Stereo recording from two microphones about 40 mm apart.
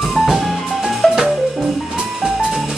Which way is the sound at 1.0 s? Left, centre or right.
Left.